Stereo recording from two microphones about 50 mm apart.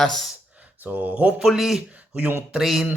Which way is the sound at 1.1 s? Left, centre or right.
Right.